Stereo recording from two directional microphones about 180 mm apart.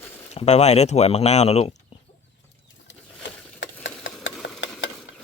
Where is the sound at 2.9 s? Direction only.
75° left (ahead or behind).